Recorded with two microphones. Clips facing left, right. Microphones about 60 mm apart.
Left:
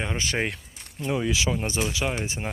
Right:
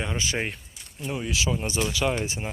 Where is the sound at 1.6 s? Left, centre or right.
Left.